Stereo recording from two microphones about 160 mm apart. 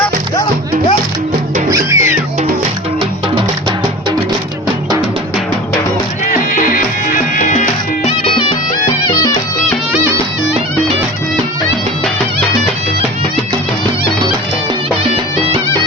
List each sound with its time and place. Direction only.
1.7 s music: 15° right (ahead or behind)
6.2 s music: 55° left (ahead or behind); by 8.4 s 35° left (ahead or behind)
8.9 s music: 25° left (ahead or behind)